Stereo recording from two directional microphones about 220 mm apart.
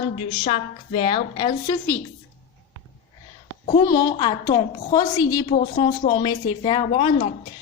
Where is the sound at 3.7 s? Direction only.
15° left (ahead or behind).